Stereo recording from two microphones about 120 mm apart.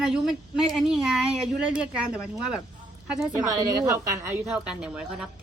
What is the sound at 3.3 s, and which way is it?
Speech, 25° right (ahead or behind).